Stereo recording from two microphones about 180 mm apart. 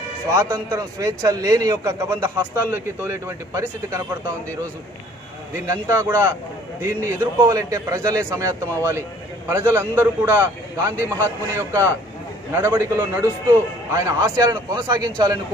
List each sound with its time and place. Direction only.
0.3 s a man's voice: 15° right (ahead or behind)
5.5 s a man's voice: 15° right (ahead or behind)